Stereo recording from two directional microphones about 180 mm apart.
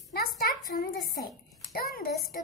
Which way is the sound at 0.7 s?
55° left (ahead or behind).